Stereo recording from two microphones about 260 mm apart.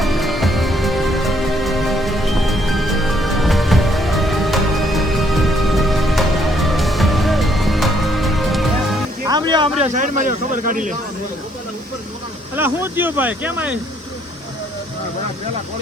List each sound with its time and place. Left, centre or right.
0.0 s music: centre
9.2 s speech: centre
12.5 s speech: centre